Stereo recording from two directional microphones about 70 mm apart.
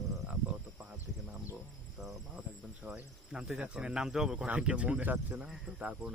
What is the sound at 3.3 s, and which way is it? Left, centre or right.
Speech, centre.